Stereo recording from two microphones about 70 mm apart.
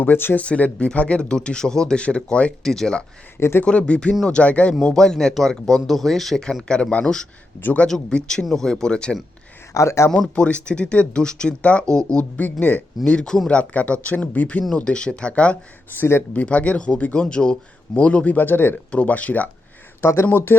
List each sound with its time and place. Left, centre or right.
0.0 s speech: left
0.4 s speech: centre
7.6 s speech: left
7.9 s speech: centre
9.7 s speech: left
10.1 s speech: centre
12.1 s speech: left
13.1 s speech: centre
13.6 s speech: centre
15.9 s speech: left
16.3 s speech: left
20.0 s speech: left
20.3 s speech: left